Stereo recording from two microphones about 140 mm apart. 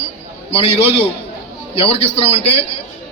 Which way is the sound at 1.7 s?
45° left (ahead or behind).